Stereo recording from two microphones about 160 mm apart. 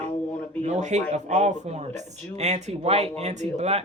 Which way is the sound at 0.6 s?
45° right (ahead or behind).